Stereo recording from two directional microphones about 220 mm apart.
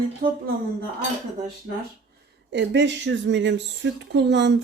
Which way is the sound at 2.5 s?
55° right (ahead or behind).